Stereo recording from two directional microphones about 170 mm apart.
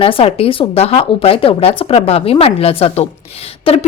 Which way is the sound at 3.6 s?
35° left (ahead or behind).